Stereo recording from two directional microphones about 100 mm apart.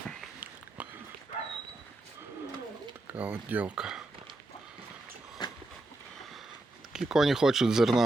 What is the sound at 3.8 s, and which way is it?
Speech, 5° right (ahead or behind).